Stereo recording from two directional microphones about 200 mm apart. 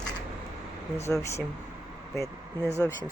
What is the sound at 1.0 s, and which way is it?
Speech, 15° left (ahead or behind).